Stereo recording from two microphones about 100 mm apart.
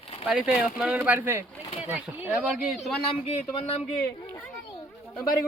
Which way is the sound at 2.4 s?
Centre (ahead or behind).